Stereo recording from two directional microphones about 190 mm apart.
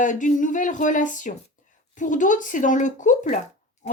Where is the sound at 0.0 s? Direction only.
40° left (ahead or behind).